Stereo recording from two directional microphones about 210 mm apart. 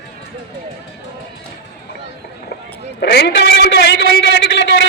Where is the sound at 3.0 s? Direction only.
50° left (ahead or behind).